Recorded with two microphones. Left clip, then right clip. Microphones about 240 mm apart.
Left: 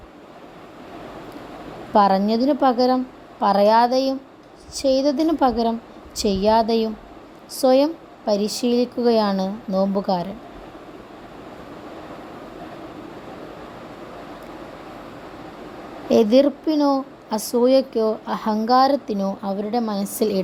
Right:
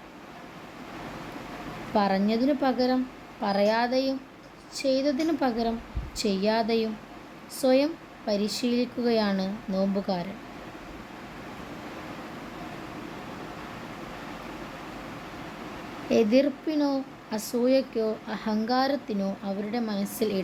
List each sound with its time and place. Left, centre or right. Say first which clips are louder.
1.9 s speech: left 9 dB; left
16.0 s speech: left 7 dB; left